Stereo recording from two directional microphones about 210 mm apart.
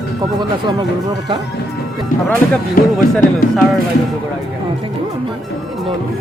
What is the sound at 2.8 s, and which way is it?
Speech, 40° left (ahead or behind).